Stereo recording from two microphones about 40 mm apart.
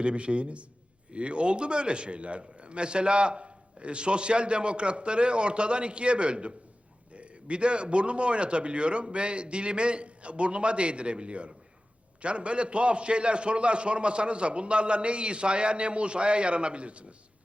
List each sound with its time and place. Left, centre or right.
0.0 s a man's voice: right